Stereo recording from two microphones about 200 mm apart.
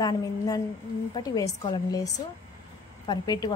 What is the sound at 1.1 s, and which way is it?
A woman's voice, 20° left (ahead or behind).